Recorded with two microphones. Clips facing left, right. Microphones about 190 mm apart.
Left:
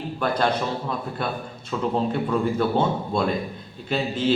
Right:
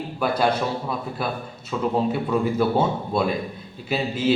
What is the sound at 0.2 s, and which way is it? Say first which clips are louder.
A man's voice: right 2 dB; 5° right (ahead or behind).